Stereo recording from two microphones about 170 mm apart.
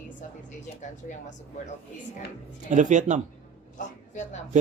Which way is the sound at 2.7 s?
45° right (ahead or behind).